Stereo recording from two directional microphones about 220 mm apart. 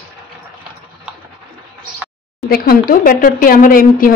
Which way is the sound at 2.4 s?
40° left (ahead or behind).